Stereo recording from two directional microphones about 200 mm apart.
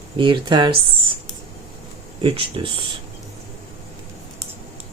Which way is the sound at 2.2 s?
25° right (ahead or behind).